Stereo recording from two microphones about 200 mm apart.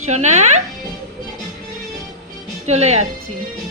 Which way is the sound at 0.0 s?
35° right (ahead or behind).